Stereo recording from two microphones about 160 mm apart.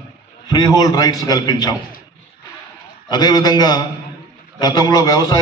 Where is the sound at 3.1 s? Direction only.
25° left (ahead or behind).